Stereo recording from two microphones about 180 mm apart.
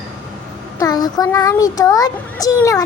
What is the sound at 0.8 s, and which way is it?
A child's voice, 20° left (ahead or behind).